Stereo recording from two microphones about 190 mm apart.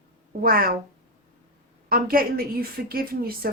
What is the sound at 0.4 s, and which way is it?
Speech, 50° right (ahead or behind).